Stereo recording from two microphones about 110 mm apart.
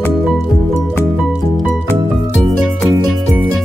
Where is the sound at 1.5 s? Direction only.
5° left (ahead or behind).